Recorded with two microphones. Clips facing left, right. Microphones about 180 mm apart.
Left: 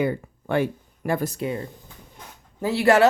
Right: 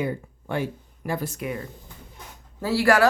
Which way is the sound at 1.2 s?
30° left (ahead or behind).